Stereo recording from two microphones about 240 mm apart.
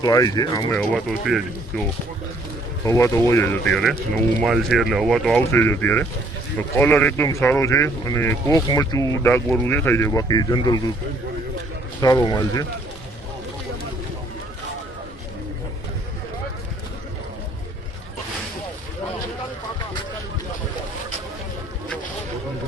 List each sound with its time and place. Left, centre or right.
0.0 s speech: centre
0.8 s speech: centre
2.8 s speech: centre
11.9 s speech: centre